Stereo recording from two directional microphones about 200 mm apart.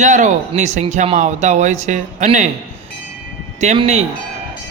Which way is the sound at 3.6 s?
35° right (ahead or behind).